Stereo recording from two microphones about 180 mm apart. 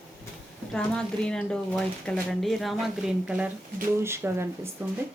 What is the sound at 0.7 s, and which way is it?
Speech, 5° left (ahead or behind).